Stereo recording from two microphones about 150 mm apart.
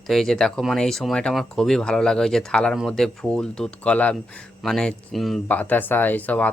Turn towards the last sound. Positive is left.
turn(degrees=10)  # may be behind; listen again after turning